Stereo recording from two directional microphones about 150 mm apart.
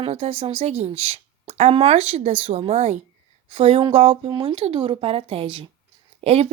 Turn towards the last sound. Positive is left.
turn(degrees=-45)  # may be behind; listen again after turning